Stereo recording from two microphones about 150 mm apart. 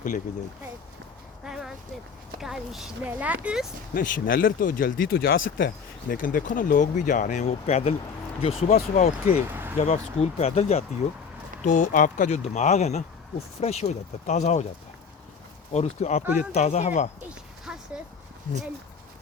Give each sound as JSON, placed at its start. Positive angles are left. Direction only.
{"t": 1.5, "sound": "a sound", "side_deg": -5}
{"t": 2.4, "sound": "a woman's voice", "side_deg": -5}
{"t": 3.9, "sound": "speech", "side_deg": 70}
{"t": 9.5, "sound": "a sound", "side_deg": -15}
{"t": 9.8, "sound": "speech", "side_deg": 45}
{"t": 11.6, "sound": "speech", "side_deg": 60}
{"t": 15.7, "sound": "speech", "side_deg": 45}
{"t": 16.2, "sound": "speech", "side_deg": -10}
{"t": 16.6, "sound": "speech", "side_deg": 50}
{"t": 17.2, "sound": "music", "side_deg": -5}